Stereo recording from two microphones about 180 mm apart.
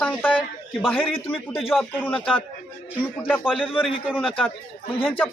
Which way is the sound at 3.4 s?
5° right (ahead or behind).